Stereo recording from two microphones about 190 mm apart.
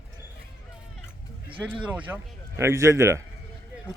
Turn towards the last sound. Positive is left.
turn(degrees=-15)  # may be behind; listen again after turning